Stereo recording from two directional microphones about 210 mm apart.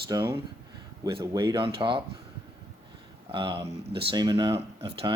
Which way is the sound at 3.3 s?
20° right (ahead or behind).